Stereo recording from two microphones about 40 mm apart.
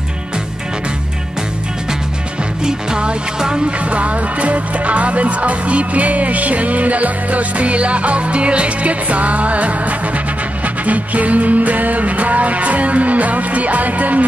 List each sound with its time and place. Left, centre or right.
2.6 s music: right
3.9 s music: right